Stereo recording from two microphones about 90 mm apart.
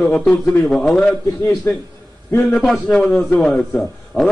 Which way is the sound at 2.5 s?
Centre (ahead or behind).